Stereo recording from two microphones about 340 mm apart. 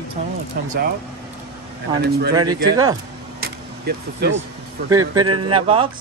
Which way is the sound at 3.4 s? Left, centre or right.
Right.